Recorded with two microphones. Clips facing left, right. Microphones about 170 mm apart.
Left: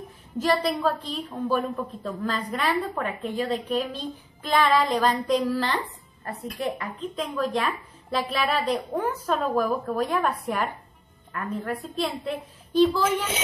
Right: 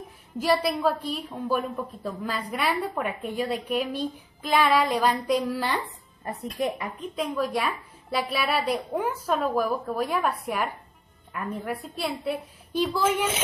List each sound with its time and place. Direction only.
0.4 s a woman's voice: 10° right (ahead or behind)